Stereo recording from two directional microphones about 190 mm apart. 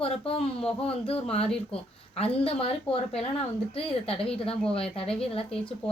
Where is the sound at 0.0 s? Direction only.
30° left (ahead or behind).